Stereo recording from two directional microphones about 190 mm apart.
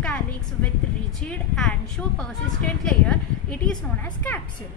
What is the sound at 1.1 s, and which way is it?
Speech, centre (ahead or behind).